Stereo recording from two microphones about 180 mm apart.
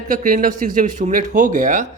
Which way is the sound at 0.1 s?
50° right (ahead or behind).